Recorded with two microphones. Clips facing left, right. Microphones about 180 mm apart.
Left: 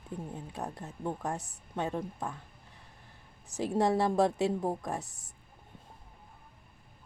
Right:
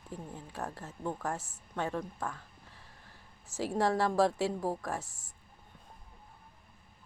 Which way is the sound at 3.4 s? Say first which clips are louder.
Left 2 dB; 15° left (ahead or behind).